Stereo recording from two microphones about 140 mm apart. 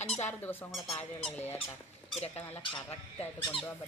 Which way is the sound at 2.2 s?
50° left (ahead or behind).